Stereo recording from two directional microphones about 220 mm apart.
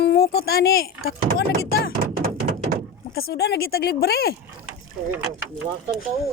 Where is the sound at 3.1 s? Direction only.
45° left (ahead or behind).